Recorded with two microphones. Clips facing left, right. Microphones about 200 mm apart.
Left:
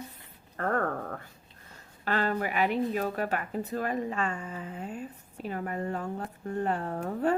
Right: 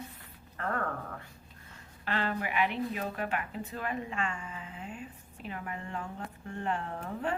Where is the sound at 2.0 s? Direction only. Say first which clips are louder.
Left 4 dB; 45° left (ahead or behind).